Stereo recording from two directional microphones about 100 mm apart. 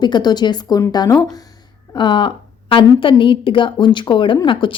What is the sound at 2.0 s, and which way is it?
A woman's voice, 55° left (ahead or behind).